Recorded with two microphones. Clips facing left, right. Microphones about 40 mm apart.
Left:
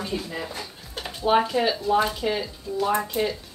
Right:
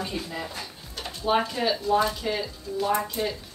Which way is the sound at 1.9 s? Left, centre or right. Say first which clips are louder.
Left 1 dB; centre.